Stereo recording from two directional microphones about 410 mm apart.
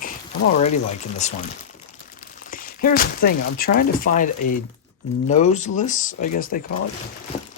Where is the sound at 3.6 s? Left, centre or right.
Centre.